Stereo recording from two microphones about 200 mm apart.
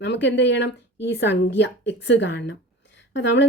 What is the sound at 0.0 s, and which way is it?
Speech, 60° left (ahead or behind).